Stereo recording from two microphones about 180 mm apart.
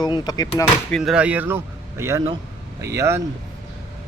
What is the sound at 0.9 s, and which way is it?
Speech, 5° right (ahead or behind).